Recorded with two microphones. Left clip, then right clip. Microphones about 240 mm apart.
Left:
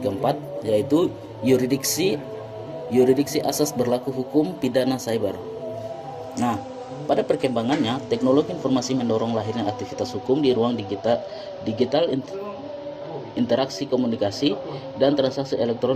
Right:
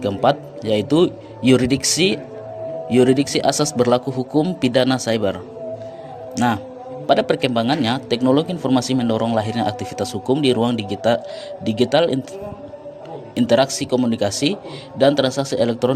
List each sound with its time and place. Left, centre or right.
0.0 s a man's voice: right
6.3 s a man's voice: right
13.3 s speech: right